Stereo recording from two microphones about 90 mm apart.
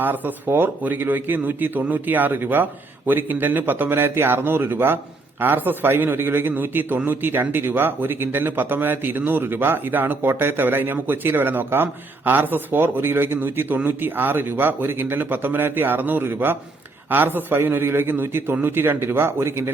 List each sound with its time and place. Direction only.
0.0 s a man's voice: 20° right (ahead or behind)